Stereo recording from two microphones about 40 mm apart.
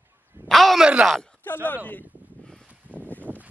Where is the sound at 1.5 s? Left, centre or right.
Left.